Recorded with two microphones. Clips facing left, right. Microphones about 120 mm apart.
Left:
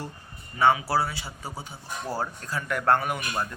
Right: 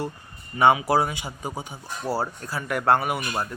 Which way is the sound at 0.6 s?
15° right (ahead or behind).